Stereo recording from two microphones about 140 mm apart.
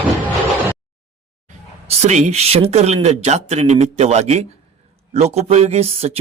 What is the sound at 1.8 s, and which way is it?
Speech, 55° right (ahead or behind).